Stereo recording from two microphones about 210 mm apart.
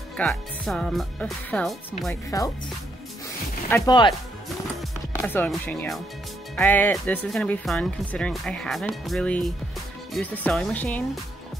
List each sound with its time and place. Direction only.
0.2 s speech: centre (ahead or behind)
3.7 s speech: 20° left (ahead or behind)
5.2 s speech: 5° left (ahead or behind)